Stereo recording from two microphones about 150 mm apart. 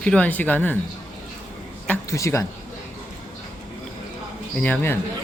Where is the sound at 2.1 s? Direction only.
20° left (ahead or behind).